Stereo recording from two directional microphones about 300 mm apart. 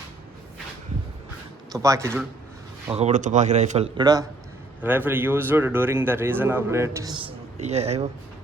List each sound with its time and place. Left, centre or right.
1.7 s a man's voice: centre
2.9 s a man's voice: right